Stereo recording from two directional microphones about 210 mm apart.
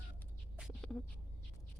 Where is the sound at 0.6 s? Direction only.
Centre (ahead or behind).